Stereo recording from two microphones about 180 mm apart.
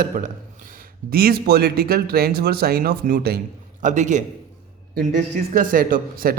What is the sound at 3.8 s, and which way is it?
Speech, 45° right (ahead or behind).